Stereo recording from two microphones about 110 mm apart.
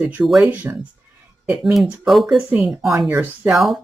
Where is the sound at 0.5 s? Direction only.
15° right (ahead or behind).